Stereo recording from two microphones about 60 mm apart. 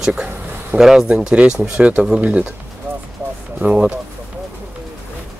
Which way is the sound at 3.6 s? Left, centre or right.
Centre.